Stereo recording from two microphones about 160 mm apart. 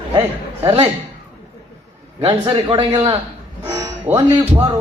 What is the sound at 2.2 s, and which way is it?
Speech, 35° right (ahead or behind).